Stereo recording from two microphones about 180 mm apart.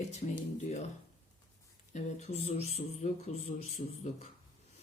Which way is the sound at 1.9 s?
40° left (ahead or behind).